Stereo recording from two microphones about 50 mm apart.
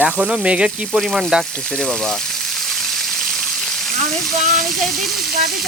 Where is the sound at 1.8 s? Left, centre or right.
Centre.